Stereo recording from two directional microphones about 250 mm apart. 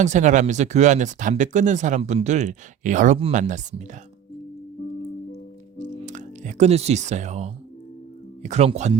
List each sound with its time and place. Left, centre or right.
0.0 s speech: right
5.7 s music: right
8.4 s speech: right